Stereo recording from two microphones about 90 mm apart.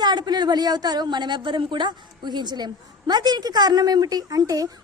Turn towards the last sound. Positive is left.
turn(degrees=-45)  # may be behind; listen again after turning